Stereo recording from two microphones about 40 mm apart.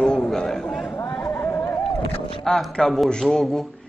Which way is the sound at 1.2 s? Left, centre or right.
Left.